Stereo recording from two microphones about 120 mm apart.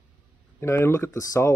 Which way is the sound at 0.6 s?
20° left (ahead or behind).